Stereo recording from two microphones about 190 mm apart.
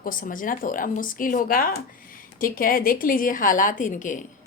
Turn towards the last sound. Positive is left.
turn(degrees=40)  # may be behind; listen again after turning